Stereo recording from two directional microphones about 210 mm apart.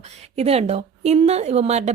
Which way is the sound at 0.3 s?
30° right (ahead or behind).